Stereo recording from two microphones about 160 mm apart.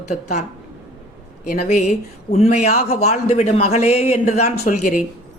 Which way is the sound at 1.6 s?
45° left (ahead or behind).